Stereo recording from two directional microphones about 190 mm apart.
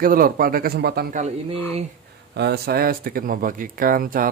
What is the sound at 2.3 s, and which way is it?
Speech, 60° right (ahead or behind).